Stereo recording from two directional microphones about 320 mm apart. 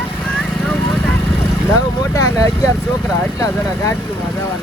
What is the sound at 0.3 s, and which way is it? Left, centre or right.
Vehicle, centre.